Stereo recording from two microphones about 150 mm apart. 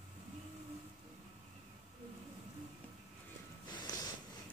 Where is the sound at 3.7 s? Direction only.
30° left (ahead or behind).